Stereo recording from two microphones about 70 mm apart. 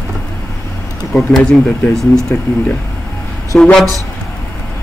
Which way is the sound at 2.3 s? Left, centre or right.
Left.